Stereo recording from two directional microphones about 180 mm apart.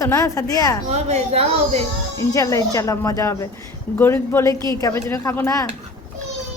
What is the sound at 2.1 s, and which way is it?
Speech, 15° left (ahead or behind).